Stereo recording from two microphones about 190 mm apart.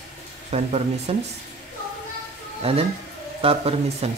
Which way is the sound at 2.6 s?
30° right (ahead or behind).